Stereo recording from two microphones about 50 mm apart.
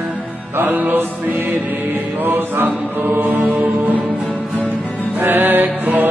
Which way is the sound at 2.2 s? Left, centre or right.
Right.